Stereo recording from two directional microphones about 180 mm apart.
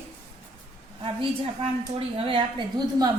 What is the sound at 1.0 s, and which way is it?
A woman's voice, 30° right (ahead or behind).